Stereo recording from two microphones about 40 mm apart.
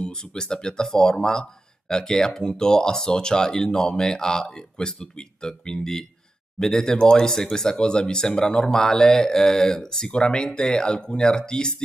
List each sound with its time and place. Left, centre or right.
0.0 s speech: centre